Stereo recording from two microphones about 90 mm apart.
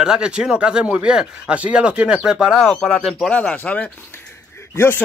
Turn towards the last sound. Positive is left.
turn(degrees=30)  # may be behind; listen again after turning